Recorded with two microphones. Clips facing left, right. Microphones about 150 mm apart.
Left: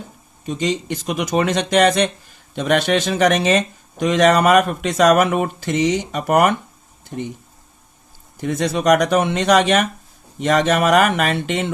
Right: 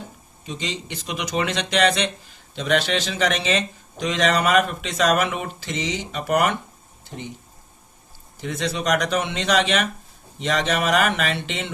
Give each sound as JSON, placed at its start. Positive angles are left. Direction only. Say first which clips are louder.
{"t": 0.4, "sound": "speech", "louder": "left 9 dB", "side_deg": 50}
{"t": 8.4, "sound": "speech", "louder": "left 6 dB", "side_deg": 50}